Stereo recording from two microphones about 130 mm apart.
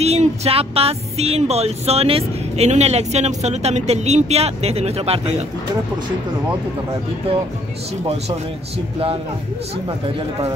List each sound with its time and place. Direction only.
0.0 s speech: 55° right (ahead or behind)